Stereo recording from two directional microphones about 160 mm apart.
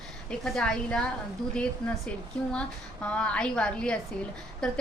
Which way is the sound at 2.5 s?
5° left (ahead or behind).